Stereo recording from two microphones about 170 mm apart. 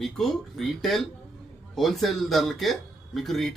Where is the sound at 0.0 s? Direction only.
Centre (ahead or behind).